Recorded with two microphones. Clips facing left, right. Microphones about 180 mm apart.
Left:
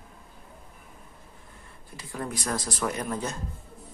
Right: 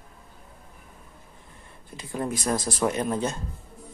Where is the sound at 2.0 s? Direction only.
20° right (ahead or behind).